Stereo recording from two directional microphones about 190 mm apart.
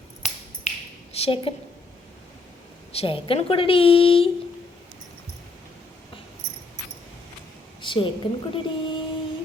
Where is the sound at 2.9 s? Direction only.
30° left (ahead or behind).